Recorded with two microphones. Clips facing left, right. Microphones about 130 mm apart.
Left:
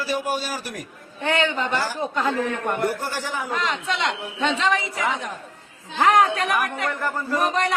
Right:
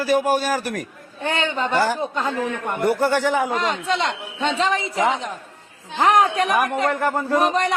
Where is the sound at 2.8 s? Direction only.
70° right (ahead or behind).